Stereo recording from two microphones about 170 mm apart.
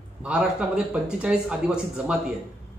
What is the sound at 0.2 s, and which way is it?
Speech, 5° right (ahead or behind).